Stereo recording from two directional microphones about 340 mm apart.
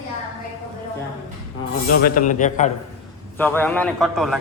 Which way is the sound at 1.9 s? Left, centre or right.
Left.